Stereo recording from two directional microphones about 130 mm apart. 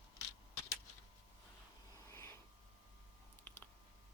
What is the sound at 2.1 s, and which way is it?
Snort, 20° left (ahead or behind).